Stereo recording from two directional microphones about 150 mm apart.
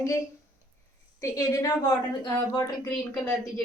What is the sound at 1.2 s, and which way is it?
A woman's voice, 25° left (ahead or behind).